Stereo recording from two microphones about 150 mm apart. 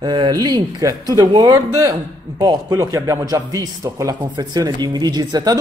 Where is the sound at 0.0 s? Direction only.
30° right (ahead or behind).